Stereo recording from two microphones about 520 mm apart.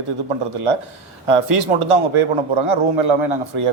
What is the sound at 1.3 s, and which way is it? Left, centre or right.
A man's voice, right.